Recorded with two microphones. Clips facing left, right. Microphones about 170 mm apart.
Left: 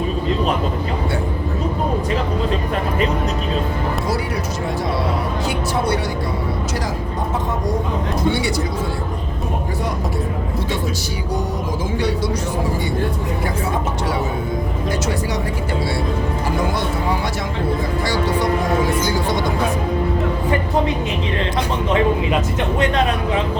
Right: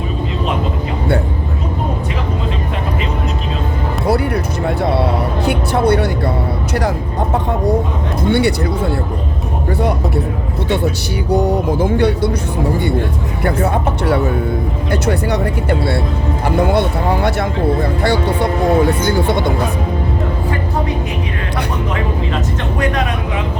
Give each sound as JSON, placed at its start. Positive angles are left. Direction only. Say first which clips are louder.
{"t": 4.8, "sound": "a sound", "louder": "right 7 dB", "side_deg": -60}
{"t": 5.5, "sound": "music", "louder": "right 7 dB", "side_deg": -60}
{"t": 8.3, "sound": "a sound", "louder": "right 9 dB", "side_deg": -60}
{"t": 11.3, "sound": "speech", "louder": "right 10 dB", "side_deg": -60}
{"t": 13.4, "sound": "speech", "louder": "right 9 dB", "side_deg": -60}
{"t": 16.6, "sound": "speech", "louder": "right 6 dB", "side_deg": -60}